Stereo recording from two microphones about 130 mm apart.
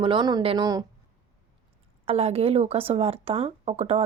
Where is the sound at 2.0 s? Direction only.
50° right (ahead or behind).